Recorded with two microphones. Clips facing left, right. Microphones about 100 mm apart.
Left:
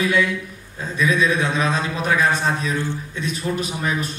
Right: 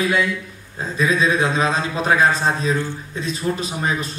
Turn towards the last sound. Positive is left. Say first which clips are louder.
# even
turn(degrees=-30)  # may be behind; listen again after turning